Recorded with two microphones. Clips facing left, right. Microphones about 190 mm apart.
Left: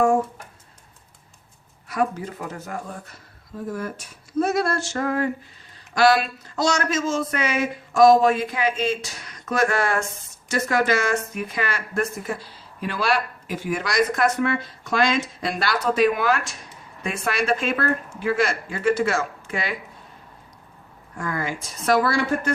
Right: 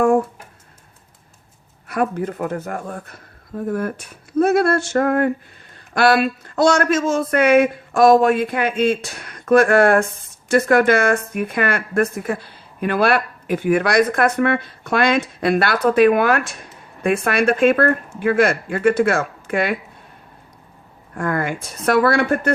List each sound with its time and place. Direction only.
1.9 s speech: 55° right (ahead or behind)
21.2 s speech: 55° right (ahead or behind)